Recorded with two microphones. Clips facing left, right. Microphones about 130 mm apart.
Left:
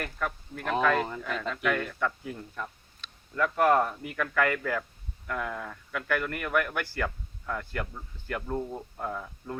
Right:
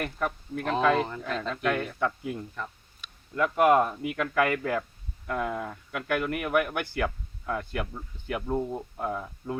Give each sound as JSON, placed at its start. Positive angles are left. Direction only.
{"t": 0.0, "sound": "speech", "side_deg": -20}